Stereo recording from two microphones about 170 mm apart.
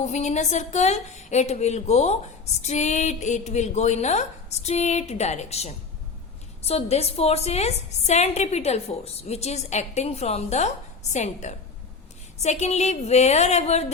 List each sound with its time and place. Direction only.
0.0 s a woman's voice: 40° left (ahead or behind)